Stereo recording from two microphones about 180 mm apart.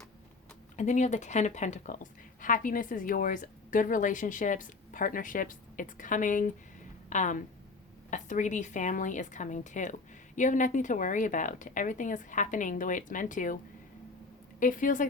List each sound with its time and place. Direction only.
0.8 s a woman's voice: 40° left (ahead or behind)
14.6 s a woman's voice: 45° left (ahead or behind)